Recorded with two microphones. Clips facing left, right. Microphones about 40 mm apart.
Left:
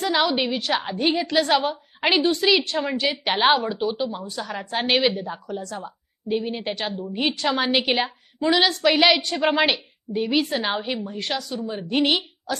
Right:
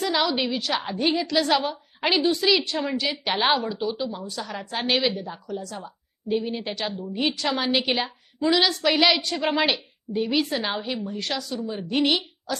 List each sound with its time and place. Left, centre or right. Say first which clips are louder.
0.0 s a woman's voice: left 2 dB; centre
3.0 s a woman's voice: left 6 dB; centre